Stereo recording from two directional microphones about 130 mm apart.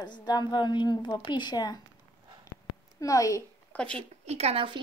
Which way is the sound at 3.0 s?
25° left (ahead or behind).